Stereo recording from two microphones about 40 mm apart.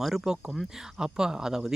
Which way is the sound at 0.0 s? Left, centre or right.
Centre.